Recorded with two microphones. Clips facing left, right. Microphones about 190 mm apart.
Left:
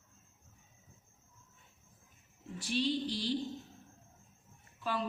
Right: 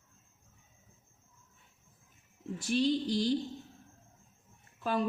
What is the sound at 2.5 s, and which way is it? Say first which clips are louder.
Speech: right 4 dB; 45° right (ahead or behind).